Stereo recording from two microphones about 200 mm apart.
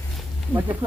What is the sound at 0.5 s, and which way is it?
Speech, 10° right (ahead or behind).